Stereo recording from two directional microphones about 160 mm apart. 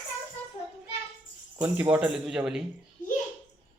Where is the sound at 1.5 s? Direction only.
10° right (ahead or behind).